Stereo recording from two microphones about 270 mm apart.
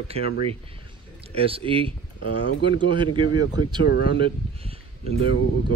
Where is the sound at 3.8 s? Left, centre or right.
Left.